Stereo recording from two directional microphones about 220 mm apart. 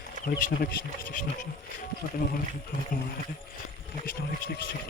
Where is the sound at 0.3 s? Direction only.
45° left (ahead or behind).